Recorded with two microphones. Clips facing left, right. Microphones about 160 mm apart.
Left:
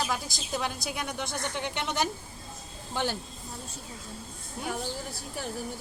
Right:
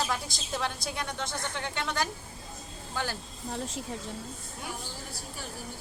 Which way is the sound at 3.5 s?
90° right.